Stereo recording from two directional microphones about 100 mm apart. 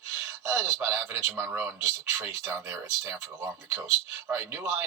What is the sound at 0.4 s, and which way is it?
Speech, 25° right (ahead or behind).